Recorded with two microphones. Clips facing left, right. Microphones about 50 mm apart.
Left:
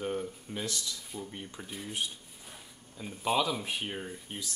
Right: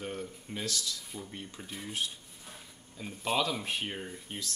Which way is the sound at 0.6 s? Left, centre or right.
Left.